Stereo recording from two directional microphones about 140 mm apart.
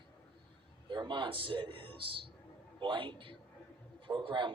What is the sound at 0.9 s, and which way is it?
A man's voice, 35° right (ahead or behind).